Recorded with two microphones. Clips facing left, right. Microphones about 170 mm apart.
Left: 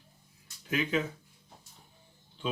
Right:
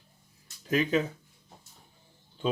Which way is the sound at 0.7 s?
40° right (ahead or behind).